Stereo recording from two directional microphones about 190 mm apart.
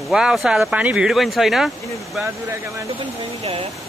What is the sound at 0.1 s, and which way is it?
Speech, 5° right (ahead or behind).